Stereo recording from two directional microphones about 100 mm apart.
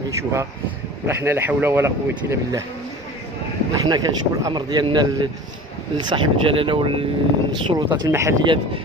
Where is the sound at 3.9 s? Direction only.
40° right (ahead or behind).